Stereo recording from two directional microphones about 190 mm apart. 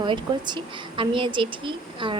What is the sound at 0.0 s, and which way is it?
A woman's voice, 25° right (ahead or behind).